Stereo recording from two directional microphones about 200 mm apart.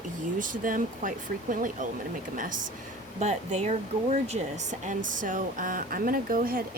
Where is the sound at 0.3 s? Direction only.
40° right (ahead or behind).